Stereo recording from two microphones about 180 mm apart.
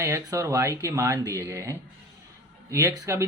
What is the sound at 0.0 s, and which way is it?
Speech, 15° right (ahead or behind).